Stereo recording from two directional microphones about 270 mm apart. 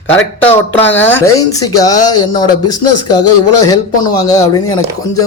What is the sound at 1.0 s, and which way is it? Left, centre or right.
Speech, centre.